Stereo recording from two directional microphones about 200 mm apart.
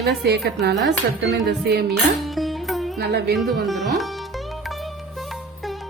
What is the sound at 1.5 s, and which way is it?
Music, 55° right (ahead or behind).